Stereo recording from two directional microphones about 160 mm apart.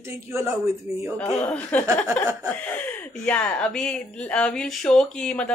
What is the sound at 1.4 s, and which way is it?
A woman's voice, 10° left (ahead or behind).